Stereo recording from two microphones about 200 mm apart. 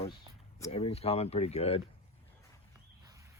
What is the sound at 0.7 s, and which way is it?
Speech, 30° left (ahead or behind).